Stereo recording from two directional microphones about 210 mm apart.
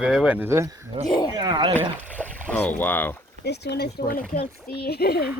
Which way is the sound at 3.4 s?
50° left (ahead or behind).